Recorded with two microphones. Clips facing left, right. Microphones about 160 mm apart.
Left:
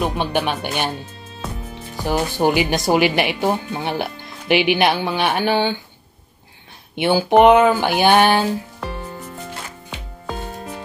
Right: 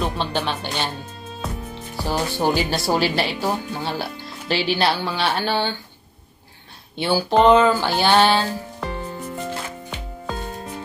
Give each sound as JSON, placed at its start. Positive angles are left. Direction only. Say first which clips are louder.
{"t": 0.0, "sound": "a woman's voice", "louder": "left 3 dB", "side_deg": 15}
{"t": 2.0, "sound": "a woman's voice", "louder": "left 3 dB", "side_deg": 15}
{"t": 7.0, "sound": "a woman's voice", "louder": "left 4 dB", "side_deg": 20}